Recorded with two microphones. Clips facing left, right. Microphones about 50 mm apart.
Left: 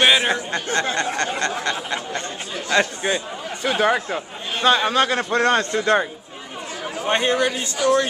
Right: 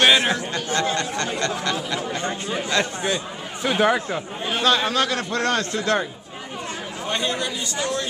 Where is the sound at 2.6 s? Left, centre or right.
Centre.